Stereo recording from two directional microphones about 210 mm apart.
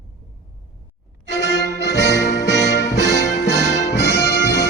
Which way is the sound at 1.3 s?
55° left (ahead or behind).